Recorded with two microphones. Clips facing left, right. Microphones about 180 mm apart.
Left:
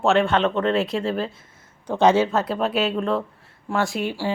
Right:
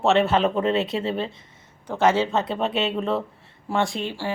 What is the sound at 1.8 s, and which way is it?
Speech, 15° left (ahead or behind).